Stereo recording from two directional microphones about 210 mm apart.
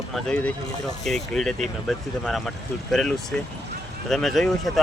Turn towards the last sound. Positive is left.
turn(degrees=0)  # may be behind; listen again after turning